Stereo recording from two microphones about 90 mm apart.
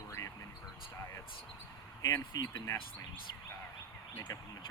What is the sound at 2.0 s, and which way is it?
Speech, 40° left (ahead or behind).